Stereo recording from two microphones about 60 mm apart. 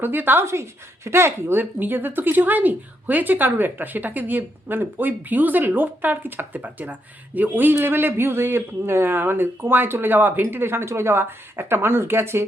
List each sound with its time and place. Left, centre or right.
0.0 s speech: right
0.4 s speech: right